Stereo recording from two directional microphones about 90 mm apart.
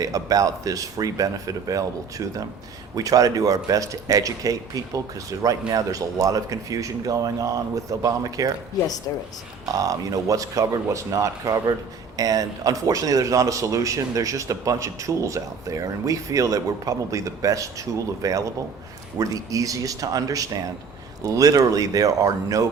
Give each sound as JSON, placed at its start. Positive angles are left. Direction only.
{"t": 0.0, "sound": "speech", "side_deg": -40}
{"t": 9.7, "sound": "speech", "side_deg": -40}